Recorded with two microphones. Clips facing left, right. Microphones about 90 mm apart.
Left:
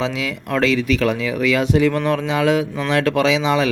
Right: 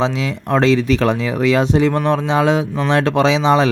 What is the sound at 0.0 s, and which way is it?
Speech, 30° right (ahead or behind).